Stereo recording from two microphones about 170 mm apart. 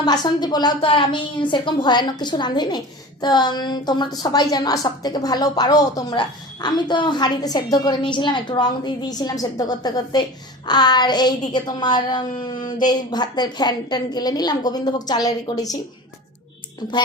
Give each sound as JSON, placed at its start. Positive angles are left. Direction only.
{"t": 0.0, "sound": "a woman's voice", "side_deg": 25}
{"t": 16.8, "sound": "a woman's voice", "side_deg": 25}